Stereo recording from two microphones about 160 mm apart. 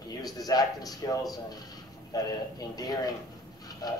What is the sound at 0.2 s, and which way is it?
Speech, 25° left (ahead or behind).